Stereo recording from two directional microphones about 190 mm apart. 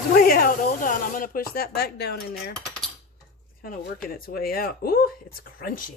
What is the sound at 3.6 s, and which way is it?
Speech, 50° left (ahead or behind).